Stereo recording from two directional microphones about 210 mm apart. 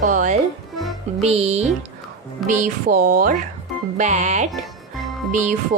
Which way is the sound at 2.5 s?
45° right (ahead or behind).